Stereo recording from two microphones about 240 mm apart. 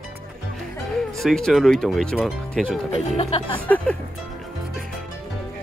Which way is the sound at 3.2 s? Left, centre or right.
Left.